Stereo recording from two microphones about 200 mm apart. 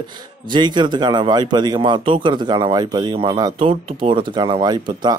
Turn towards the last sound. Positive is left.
turn(degrees=-20)  # may be behind; listen again after turning